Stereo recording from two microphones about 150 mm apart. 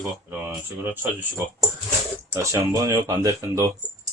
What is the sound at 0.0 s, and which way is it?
Speech, 10° right (ahead or behind).